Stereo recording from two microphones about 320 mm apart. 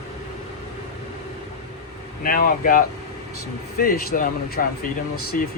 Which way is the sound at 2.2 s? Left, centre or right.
Left.